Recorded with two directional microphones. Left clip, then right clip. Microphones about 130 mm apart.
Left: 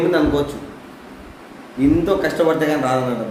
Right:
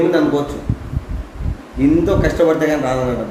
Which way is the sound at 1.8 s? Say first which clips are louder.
Right 2 dB; 10° left (ahead or behind).